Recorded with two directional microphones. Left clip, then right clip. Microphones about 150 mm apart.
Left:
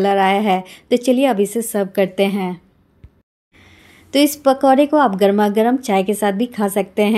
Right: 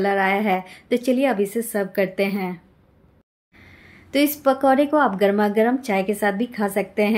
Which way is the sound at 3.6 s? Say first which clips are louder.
Left 1 dB; 30° left (ahead or behind).